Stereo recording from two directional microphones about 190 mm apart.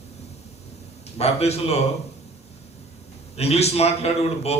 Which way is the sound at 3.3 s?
35° left (ahead or behind).